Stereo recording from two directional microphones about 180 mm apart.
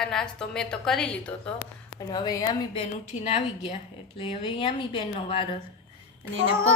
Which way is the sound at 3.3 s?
35° left (ahead or behind).